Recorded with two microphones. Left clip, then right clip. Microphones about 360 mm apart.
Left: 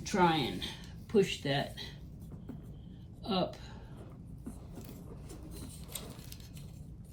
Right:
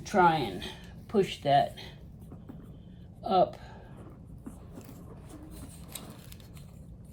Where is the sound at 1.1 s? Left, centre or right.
Right.